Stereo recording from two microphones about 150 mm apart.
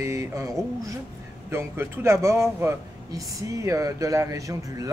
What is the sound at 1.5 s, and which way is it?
A man's voice, 15° right (ahead or behind).